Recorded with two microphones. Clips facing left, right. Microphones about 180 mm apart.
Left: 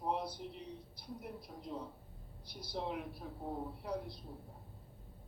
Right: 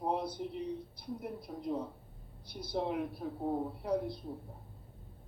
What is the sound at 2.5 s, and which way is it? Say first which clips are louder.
Speech: right 6 dB; 55° right (ahead or behind).